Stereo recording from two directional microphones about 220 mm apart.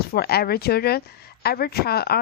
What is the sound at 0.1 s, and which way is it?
Speech, 45° left (ahead or behind).